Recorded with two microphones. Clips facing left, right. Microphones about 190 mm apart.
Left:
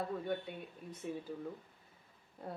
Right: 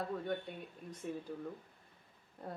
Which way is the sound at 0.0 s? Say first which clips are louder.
Even; centre (ahead or behind).